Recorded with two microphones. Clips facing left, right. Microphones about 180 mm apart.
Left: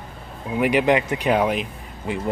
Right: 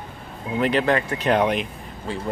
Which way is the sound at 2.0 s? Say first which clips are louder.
Left 3 dB; 15° left (ahead or behind).